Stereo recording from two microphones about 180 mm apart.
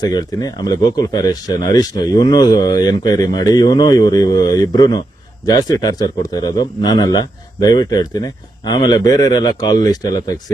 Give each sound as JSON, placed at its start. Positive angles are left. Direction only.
{"t": 0.0, "sound": "speech", "side_deg": 20}